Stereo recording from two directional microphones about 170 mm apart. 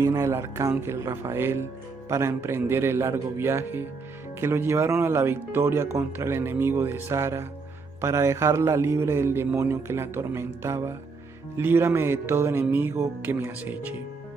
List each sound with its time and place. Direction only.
0.0 s speech: 15° right (ahead or behind)